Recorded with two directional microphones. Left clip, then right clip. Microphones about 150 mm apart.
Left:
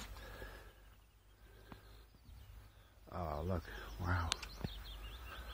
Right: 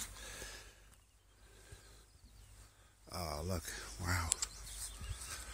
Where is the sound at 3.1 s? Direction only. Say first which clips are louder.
Even; 30° right (ahead or behind).